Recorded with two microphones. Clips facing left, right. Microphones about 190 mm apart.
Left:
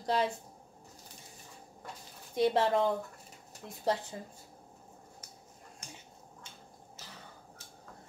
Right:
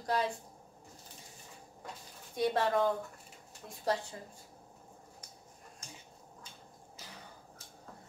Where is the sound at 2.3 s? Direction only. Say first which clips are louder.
Left 3 dB; 25° left (ahead or behind).